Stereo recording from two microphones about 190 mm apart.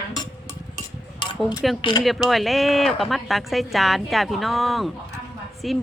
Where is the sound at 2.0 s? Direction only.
Centre (ahead or behind).